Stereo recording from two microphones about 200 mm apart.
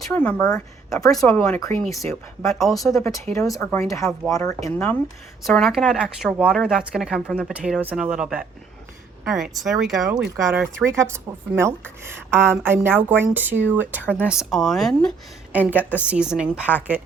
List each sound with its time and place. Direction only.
0.0 s speech: 5° left (ahead or behind)
1.1 s speech: 5° left (ahead or behind)
1.5 s speech: 15° left (ahead or behind)
2.6 s speech: centre (ahead or behind)
3.5 s speech: 15° left (ahead or behind)
5.4 s speech: centre (ahead or behind)
10.9 s speech: 15° right (ahead or behind)